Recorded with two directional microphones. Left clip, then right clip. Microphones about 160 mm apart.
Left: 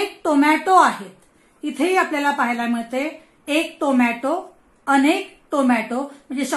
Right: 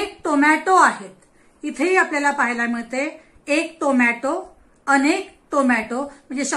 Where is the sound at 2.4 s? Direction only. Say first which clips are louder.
Even; 60° left (ahead or behind).